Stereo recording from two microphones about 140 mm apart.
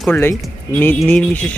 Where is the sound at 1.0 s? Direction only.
5° left (ahead or behind).